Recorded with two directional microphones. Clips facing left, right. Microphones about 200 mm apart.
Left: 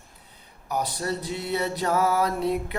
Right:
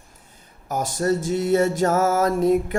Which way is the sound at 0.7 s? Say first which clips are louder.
Right 6 dB; 45° right (ahead or behind).